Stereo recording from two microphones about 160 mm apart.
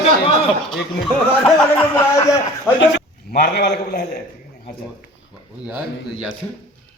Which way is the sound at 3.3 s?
80° left.